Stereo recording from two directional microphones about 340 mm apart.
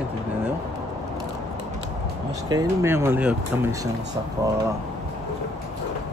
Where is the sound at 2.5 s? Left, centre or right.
Centre.